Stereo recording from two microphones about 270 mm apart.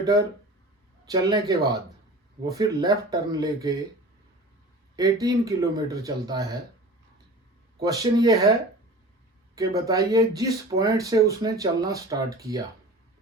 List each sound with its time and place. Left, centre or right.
1.0 s speech: centre
4.9 s speech: centre
7.8 s speech: centre
9.6 s speech: centre